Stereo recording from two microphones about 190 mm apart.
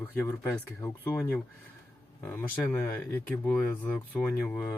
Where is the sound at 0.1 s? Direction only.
10° left (ahead or behind).